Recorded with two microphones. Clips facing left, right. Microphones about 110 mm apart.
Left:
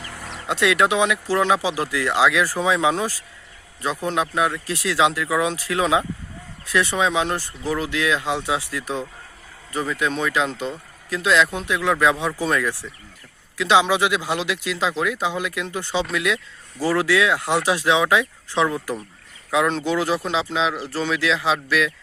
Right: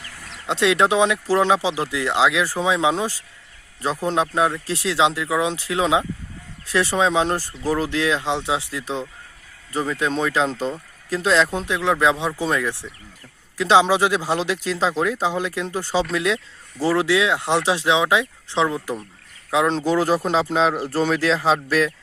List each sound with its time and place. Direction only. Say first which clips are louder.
0.0 s a sound: left 5 dB; 90° left
0.4 s speech: right 1 dB; 25° right (ahead or behind)
3.8 s speech: right 2 dB; 30° right (ahead or behind)
6.7 s speech: right 1 dB; 30° right (ahead or behind)
13.6 s speech: right 2 dB; 35° right (ahead or behind)